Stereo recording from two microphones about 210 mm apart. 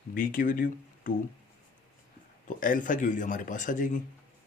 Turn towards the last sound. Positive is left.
turn(degrees=35)  # may be behind; listen again after turning